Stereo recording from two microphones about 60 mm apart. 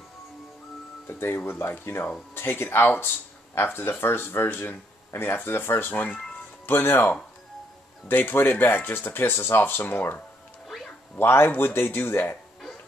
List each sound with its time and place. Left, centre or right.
1.0 s speech: left